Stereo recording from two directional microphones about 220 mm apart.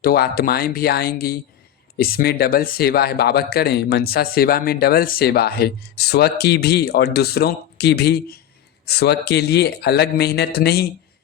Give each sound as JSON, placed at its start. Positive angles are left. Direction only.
{"t": 0.0, "sound": "speech", "side_deg": 45}